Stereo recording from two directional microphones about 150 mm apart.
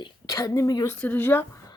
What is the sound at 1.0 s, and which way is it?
Speech, 10° left (ahead or behind).